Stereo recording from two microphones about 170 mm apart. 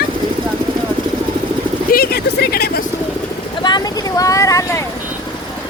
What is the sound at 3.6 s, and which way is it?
Vehicle, 25° left (ahead or behind).